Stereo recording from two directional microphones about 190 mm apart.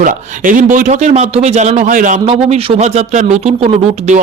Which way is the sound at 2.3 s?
30° right (ahead or behind).